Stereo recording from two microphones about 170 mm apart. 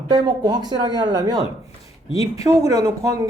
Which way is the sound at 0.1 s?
25° right (ahead or behind).